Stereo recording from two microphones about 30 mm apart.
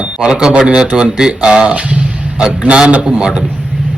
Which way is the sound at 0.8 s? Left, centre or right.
Right.